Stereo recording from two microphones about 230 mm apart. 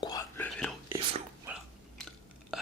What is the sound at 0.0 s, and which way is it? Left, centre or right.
Whispering, centre.